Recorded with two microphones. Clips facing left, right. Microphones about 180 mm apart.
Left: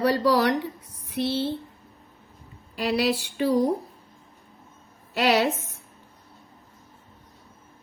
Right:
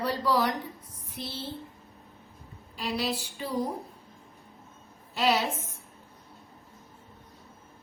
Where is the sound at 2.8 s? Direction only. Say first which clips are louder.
Left 7 dB; 70° left (ahead or behind).